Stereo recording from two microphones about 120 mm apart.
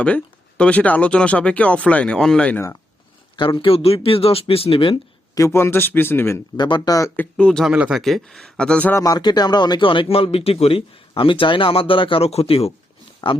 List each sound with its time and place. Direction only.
0.0 s speech: 10° left (ahead or behind)
3.3 s speech: 45° left (ahead or behind)
5.3 s speech: 25° left (ahead or behind)
6.6 s speech: 40° left (ahead or behind)
7.2 s speech: 5° left (ahead or behind)
7.7 s speech: 10° right (ahead or behind)
8.0 s speech: 5° left (ahead or behind)
8.9 s speech: 25° left (ahead or behind); by 12.7 s 55° left (ahead or behind)